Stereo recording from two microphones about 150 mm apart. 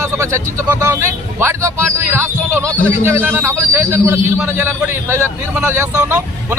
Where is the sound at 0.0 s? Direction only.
20° right (ahead or behind).